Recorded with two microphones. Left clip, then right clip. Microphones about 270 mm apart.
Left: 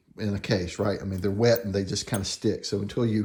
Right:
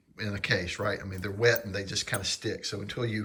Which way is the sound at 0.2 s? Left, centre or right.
Centre.